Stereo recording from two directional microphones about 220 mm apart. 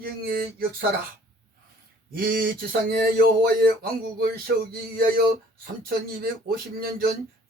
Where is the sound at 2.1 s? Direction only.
40° right (ahead or behind).